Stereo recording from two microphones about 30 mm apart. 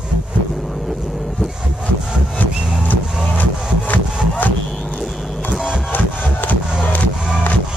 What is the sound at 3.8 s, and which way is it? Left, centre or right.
Sawing, left.